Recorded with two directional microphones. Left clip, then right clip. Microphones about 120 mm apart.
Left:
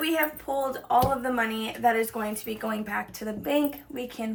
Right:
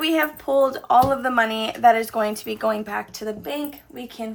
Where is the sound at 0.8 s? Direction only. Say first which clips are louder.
Right 6 dB; 65° right (ahead or behind).